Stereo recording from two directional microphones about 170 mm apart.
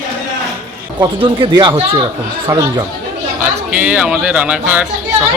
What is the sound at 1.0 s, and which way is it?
Speech, 30° right (ahead or behind).